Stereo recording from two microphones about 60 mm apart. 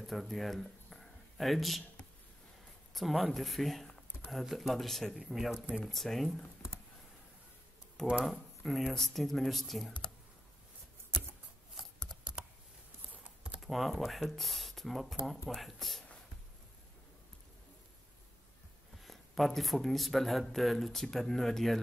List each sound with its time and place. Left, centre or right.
0.0 s speech: centre
2.9 s speech: centre
8.3 s speech: centre
13.1 s typing: centre
13.6 s speech: centre
19.0 s speech: centre